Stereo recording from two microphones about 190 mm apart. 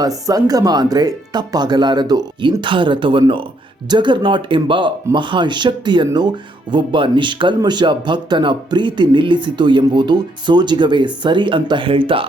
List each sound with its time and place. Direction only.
0.3 s speech: 20° right (ahead or behind)